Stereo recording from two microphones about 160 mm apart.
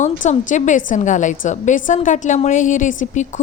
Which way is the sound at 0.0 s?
50° left (ahead or behind).